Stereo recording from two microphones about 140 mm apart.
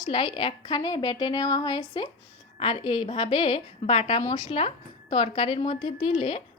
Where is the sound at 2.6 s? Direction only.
40° left (ahead or behind).